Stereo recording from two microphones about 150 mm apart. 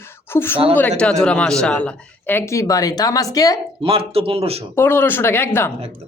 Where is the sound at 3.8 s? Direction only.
40° right (ahead or behind).